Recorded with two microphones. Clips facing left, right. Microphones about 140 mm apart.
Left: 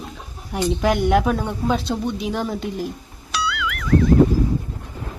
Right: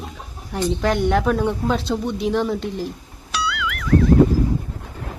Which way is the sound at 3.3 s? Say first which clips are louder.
Even; centre (ahead or behind).